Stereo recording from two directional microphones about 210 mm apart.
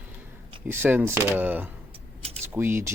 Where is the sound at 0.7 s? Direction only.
10° right (ahead or behind).